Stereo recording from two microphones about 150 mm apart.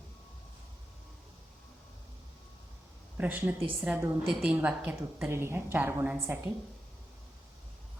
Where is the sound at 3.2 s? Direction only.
10° right (ahead or behind).